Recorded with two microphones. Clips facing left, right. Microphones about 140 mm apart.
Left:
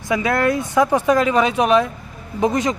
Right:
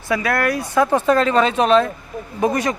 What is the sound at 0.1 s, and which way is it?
Speech, 20° left (ahead or behind).